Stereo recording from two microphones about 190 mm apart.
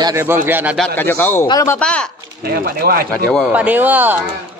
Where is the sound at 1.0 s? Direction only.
10° left (ahead or behind).